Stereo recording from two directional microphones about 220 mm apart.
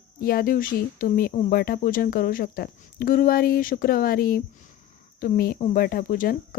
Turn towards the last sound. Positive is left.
turn(degrees=40)  # may be behind; listen again after turning